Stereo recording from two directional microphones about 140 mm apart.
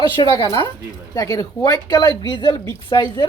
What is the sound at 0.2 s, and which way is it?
Speech, 25° left (ahead or behind).